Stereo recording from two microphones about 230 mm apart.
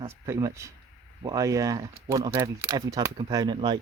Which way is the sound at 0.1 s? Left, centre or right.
Centre.